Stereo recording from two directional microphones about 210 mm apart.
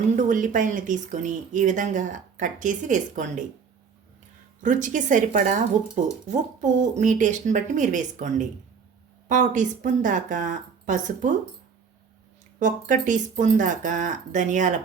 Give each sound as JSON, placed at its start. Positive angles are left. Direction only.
{"t": 0.2, "sound": "speech", "side_deg": -35}
{"t": 4.6, "sound": "speech", "side_deg": -35}
{"t": 12.5, "sound": "speech", "side_deg": -40}